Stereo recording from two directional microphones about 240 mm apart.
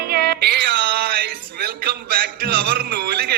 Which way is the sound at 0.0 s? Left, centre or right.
Right.